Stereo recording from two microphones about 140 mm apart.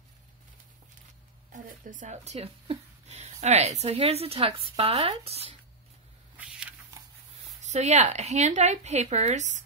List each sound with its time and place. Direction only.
1.5 s speech: 60° right (ahead or behind); by 5.6 s 45° right (ahead or behind)
7.6 s a woman's voice: 55° right (ahead or behind)